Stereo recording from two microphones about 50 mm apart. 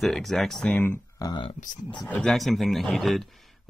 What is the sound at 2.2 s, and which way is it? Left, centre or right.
Speech, centre.